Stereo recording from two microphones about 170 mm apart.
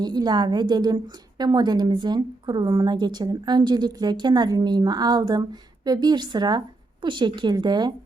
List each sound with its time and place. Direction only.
0.0 s a woman's voice: 25° right (ahead or behind)